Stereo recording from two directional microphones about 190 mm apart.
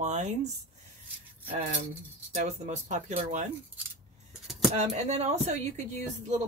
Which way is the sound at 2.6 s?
40° right (ahead or behind).